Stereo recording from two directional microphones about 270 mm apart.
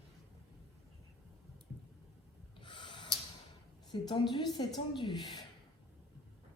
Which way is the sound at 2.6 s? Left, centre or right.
Centre.